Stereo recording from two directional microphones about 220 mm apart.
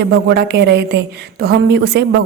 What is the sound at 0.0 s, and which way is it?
A woman's voice, 50° right (ahead or behind).